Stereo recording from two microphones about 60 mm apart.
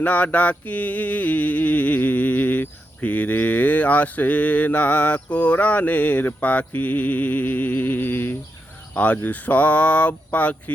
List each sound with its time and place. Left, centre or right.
0.0 s mantra: left